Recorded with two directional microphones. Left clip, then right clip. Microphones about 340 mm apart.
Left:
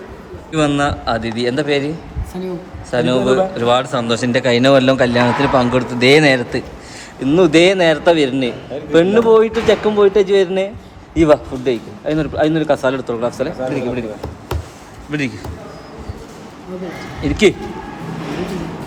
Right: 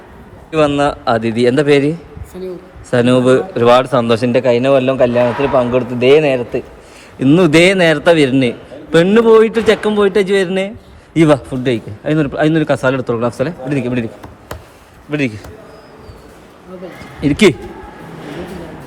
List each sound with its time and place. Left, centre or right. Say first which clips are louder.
0.5 s speech: right 3 dB; centre
7.2 s a man's voice: right 2 dB; centre
15.1 s speech: right 3 dB; centre
17.2 s a man's voice: right 3 dB; centre